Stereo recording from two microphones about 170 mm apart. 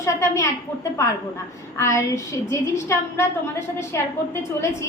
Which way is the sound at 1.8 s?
15° left (ahead or behind).